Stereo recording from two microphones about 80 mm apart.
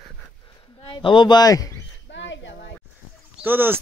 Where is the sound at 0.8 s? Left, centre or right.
Left.